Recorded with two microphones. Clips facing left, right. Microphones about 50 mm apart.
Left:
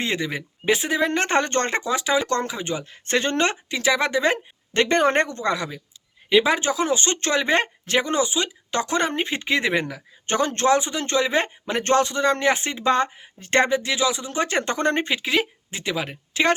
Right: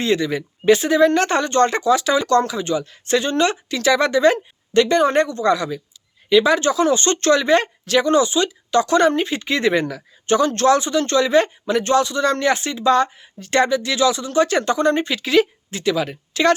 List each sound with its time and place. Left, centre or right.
0.0 s speech: left
1.4 s speech: left
3.7 s speech: centre
4.7 s speech: left
5.4 s speech: left
9.5 s speech: centre
10.2 s speech: left
12.2 s speech: left
13.9 s speech: centre; by 15.1 s left
15.1 s speech: centre